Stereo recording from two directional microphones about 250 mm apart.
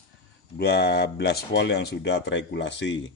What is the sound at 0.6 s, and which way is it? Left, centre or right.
Speech, left.